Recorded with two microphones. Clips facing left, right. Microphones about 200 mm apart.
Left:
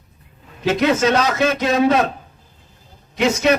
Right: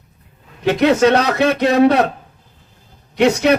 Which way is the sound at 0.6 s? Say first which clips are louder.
Right 4 dB; 65° right (ahead or behind).